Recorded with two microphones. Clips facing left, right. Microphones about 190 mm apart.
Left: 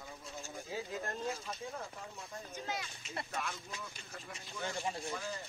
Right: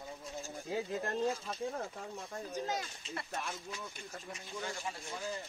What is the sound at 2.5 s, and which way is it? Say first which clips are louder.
Speech: right 5 dB; 40° right (ahead or behind).